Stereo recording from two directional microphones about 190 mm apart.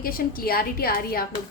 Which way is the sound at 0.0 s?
50° left (ahead or behind).